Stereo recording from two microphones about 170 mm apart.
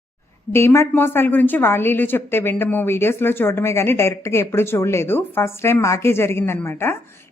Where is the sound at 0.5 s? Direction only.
15° left (ahead or behind).